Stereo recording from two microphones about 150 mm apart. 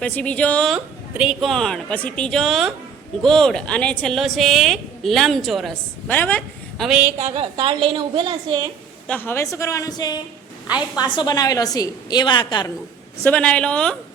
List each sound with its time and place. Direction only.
0.0 s a woman's voice: 10° left (ahead or behind)
0.7 s a woman's voice: 5° right (ahead or behind)
6.1 s speech: 10° left (ahead or behind)
6.8 s a woman's voice: 5° right (ahead or behind)
7.3 s a woman's voice: 35° right (ahead or behind)
9.0 s a woman's voice: 10° left (ahead or behind); by 12.7 s 30° left (ahead or behind)
13.2 s a woman's voice: 10° left (ahead or behind)